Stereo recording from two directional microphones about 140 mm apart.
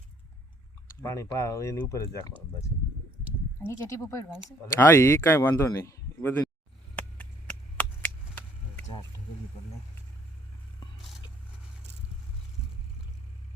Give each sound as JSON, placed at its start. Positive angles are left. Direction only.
{"t": 1.0, "sound": "speech", "side_deg": 20}
{"t": 3.7, "sound": "speech", "side_deg": 20}
{"t": 6.9, "sound": "chop", "side_deg": 10}